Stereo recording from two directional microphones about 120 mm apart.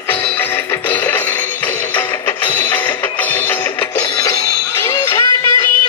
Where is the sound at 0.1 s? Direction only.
15° left (ahead or behind).